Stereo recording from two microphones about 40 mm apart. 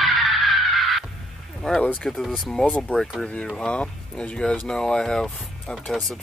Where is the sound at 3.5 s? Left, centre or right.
Left.